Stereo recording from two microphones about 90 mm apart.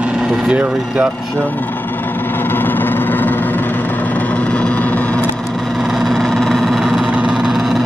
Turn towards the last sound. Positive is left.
turn(degrees=-5)  # may be behind; listen again after turning